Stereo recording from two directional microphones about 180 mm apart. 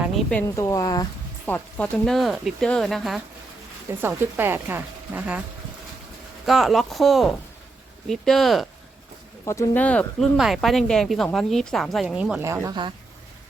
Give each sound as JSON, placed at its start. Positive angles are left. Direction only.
{"t": 0.3, "sound": "speech", "side_deg": 15}
{"t": 1.5, "sound": "speech", "side_deg": 10}
{"t": 3.8, "sound": "speech", "side_deg": -10}
{"t": 6.4, "sound": "speech", "side_deg": 0}
{"t": 9.5, "sound": "speech", "side_deg": 10}
{"t": 12.5, "sound": "speech", "side_deg": -15}